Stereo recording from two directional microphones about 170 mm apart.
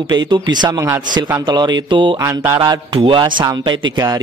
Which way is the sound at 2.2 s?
15° right (ahead or behind).